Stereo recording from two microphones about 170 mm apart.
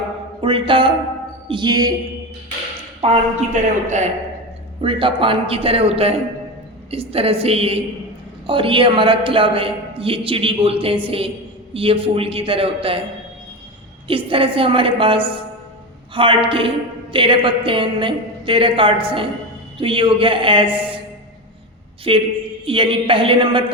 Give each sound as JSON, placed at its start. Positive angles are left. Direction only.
{"t": 0.4, "sound": "a woman's voice", "side_deg": -30}
{"t": 3.0, "sound": "a man's voice", "side_deg": -35}
{"t": 4.8, "sound": "a man's voice", "side_deg": -30}
{"t": 14.1, "sound": "a man's voice", "side_deg": -30}
{"t": 22.1, "sound": "a man's voice", "side_deg": -30}